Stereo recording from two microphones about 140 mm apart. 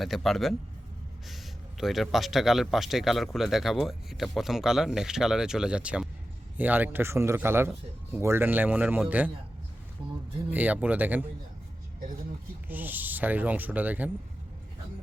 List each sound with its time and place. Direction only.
0.0 s speech: centre (ahead or behind)
1.8 s speech: centre (ahead or behind)
10.5 s speech: 10° right (ahead or behind)
12.6 s speech: 15° right (ahead or behind)